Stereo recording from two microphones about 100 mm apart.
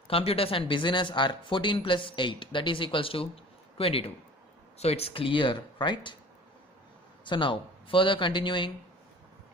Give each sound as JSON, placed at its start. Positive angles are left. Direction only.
{"t": 0.1, "sound": "speech", "side_deg": 70}
{"t": 4.7, "sound": "speech", "side_deg": 90}
{"t": 7.2, "sound": "speech", "side_deg": 55}